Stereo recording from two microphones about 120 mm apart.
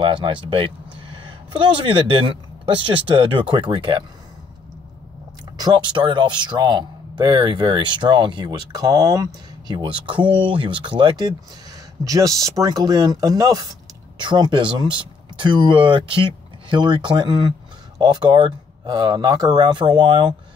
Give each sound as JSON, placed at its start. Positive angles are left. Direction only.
{"t": 0.0, "sound": "speech", "side_deg": -45}
{"t": 1.9, "sound": "speech", "side_deg": -50}
{"t": 5.6, "sound": "speech", "side_deg": -40}